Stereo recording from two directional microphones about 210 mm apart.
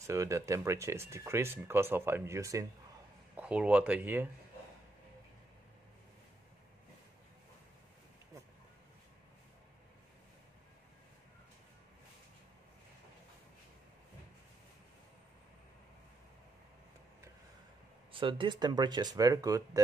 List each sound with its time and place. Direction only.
0.0 s speech: 15° right (ahead or behind)
18.1 s speech: 25° right (ahead or behind)